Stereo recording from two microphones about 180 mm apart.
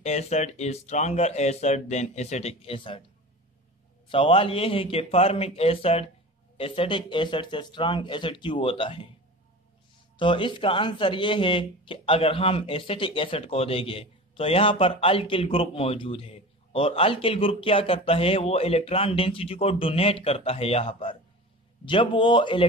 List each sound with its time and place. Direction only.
0.0 s speech: 40° left (ahead or behind)
4.1 s speech: 30° left (ahead or behind)
10.1 s speech: 25° left (ahead or behind)